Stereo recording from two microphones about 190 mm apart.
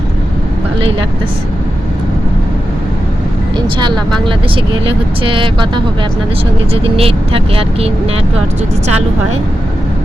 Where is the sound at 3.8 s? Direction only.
25° right (ahead or behind).